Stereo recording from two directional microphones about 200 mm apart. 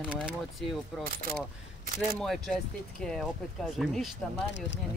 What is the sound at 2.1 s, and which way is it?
Speech, centre (ahead or behind).